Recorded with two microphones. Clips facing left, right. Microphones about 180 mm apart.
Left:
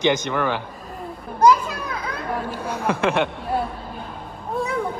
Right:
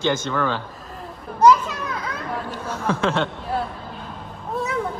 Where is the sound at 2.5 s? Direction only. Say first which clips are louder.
Right 1 dB; 10° left (ahead or behind).